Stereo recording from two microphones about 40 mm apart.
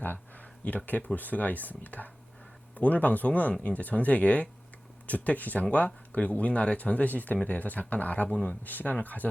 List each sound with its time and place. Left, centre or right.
0.0 s a sound: left
0.6 s speech: left
8.6 s speech: left